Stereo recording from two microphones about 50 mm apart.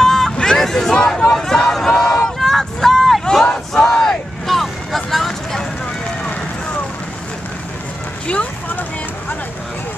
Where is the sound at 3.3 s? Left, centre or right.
Centre.